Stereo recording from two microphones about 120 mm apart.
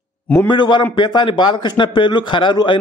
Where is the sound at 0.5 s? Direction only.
40° left (ahead or behind).